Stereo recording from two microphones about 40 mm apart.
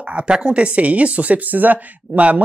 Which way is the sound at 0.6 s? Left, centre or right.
Right.